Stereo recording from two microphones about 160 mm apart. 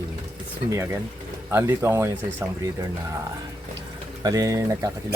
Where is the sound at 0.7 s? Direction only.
20° right (ahead or behind).